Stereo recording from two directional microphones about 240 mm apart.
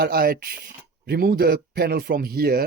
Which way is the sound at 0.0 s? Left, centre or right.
Right.